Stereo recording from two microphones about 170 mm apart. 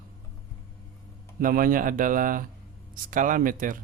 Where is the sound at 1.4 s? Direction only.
55° right (ahead or behind).